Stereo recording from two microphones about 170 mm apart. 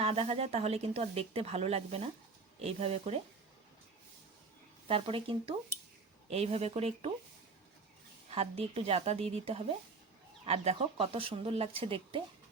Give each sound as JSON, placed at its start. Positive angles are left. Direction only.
{"t": 0.0, "sound": "a woman's voice", "side_deg": -35}
{"t": 4.9, "sound": "a woman's voice", "side_deg": -35}
{"t": 8.3, "sound": "a woman's voice", "side_deg": -35}